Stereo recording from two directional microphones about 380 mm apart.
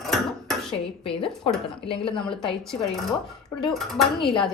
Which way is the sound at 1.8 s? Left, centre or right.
Centre.